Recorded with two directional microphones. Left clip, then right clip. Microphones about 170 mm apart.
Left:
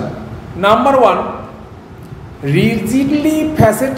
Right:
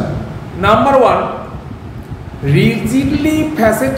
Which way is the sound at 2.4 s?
30° left (ahead or behind).